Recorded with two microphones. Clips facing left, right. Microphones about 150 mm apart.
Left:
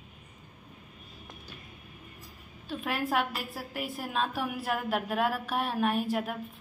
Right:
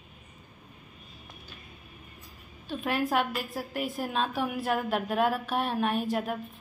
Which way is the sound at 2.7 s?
Centre (ahead or behind).